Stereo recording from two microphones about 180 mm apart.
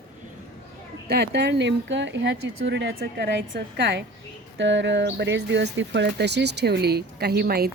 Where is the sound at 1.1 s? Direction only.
65° right (ahead or behind).